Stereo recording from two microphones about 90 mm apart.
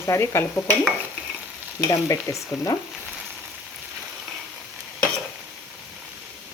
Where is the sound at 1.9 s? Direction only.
35° left (ahead or behind).